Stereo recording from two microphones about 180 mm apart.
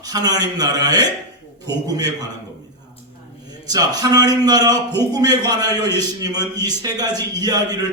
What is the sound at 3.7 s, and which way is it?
A man's voice, 20° right (ahead or behind).